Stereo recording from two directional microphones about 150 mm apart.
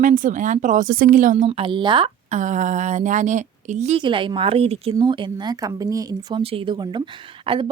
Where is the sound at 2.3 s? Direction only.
55° right (ahead or behind).